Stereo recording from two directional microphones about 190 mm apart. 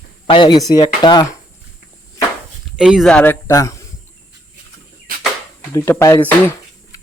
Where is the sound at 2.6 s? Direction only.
5° right (ahead or behind); by 3.8 s 15° left (ahead or behind).